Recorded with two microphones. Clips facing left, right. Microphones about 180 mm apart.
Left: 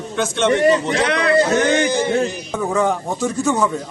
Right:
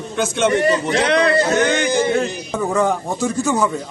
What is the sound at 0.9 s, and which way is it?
Speech, 25° right (ahead or behind).